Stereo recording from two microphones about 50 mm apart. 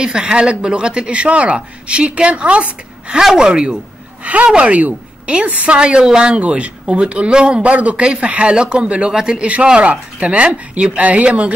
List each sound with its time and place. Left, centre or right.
0.0 s a woman's voice: centre
3.2 s speech: centre
4.2 s a woman's voice: right